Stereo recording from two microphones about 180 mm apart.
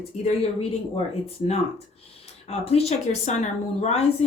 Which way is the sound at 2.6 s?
35° left (ahead or behind).